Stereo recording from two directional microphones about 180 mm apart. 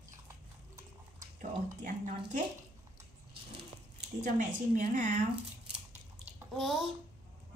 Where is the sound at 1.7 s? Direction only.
45° right (ahead or behind).